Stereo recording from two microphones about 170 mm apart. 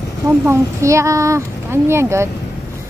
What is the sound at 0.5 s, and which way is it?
Speech, 15° right (ahead or behind).